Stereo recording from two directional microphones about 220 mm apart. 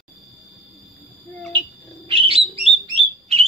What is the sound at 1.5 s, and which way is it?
Bird, 25° right (ahead or behind).